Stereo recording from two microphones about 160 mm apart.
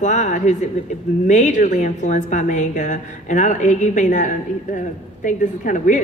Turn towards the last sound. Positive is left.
turn(degrees=50)  # may be behind; listen again after turning